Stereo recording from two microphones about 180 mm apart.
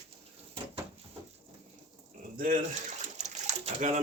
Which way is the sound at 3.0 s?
40° right (ahead or behind).